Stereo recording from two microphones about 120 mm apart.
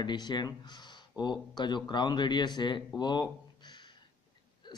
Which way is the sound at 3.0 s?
40° left (ahead or behind).